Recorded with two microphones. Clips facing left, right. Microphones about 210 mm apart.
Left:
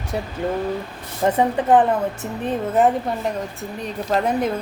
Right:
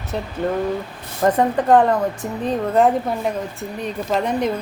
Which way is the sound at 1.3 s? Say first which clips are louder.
Right 1 dB; 10° left (ahead or behind).